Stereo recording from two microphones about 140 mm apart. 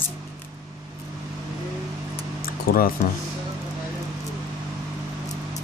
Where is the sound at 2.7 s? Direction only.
90° left.